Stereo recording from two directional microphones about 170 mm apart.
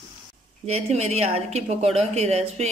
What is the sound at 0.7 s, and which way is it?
Speech, 40° right (ahead or behind).